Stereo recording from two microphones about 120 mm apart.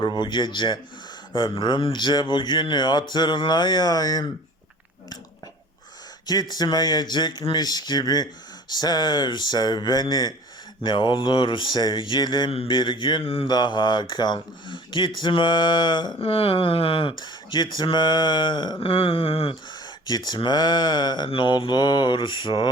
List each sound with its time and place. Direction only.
0.2 s speech: 40° left (ahead or behind)
6.2 s speech: 35° left (ahead or behind)
16.1 s speech: 50° left (ahead or behind)
20.1 s speech: 35° left (ahead or behind)